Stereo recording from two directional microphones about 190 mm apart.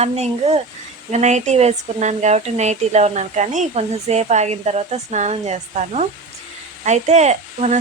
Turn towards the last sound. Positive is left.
turn(degrees=-35)  # may be behind; listen again after turning